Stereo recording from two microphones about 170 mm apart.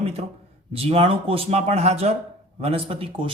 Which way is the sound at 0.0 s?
35° right (ahead or behind).